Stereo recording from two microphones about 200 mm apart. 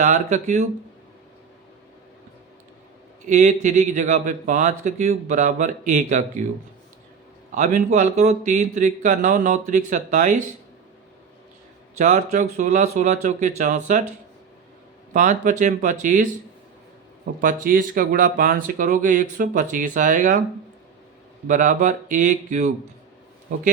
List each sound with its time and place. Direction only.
0.0 s speech: 35° right (ahead or behind)
3.2 s speech: 40° right (ahead or behind)
7.5 s speech: 40° right (ahead or behind)
11.9 s speech: 35° right (ahead or behind)
15.1 s speech: 40° right (ahead or behind)
17.4 s speech: 45° right (ahead or behind)
21.4 s speech: 40° right (ahead or behind)